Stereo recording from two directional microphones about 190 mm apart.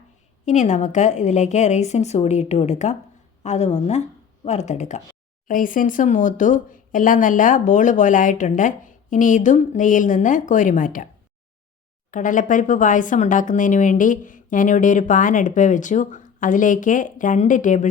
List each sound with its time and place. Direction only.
0.4 s a woman's voice: 40° left (ahead or behind)
12.1 s speech: 45° left (ahead or behind)